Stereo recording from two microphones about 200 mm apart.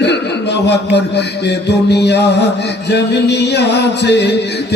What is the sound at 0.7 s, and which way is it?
Music, 60° left (ahead or behind).